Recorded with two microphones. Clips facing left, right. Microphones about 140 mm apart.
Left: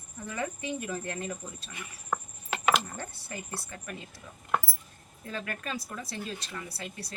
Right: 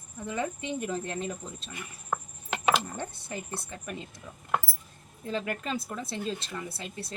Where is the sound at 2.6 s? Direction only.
20° right (ahead or behind).